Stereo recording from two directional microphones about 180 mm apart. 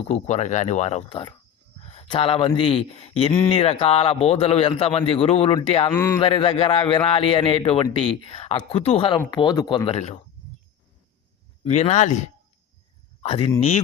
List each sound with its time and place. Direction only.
0.0 s speech: 35° left (ahead or behind)
5.9 s a man's voice: 10° left (ahead or behind)
6.1 s speech: 30° left (ahead or behind)
11.6 s speech: 35° left (ahead or behind)
13.2 s speech: 30° left (ahead or behind)